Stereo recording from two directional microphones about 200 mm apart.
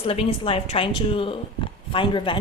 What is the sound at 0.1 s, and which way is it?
A woman's voice, 30° left (ahead or behind).